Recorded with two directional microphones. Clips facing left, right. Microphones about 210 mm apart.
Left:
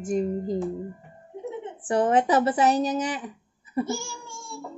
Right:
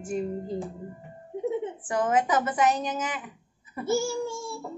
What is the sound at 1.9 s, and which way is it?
Speech, 30° left (ahead or behind).